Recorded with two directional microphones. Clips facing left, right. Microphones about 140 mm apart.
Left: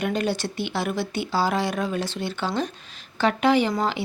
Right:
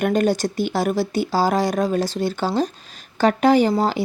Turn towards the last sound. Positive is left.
turn(degrees=-40)  # may be behind; listen again after turning